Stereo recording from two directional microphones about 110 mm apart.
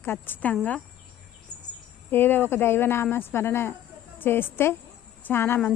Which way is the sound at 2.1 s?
20° left (ahead or behind).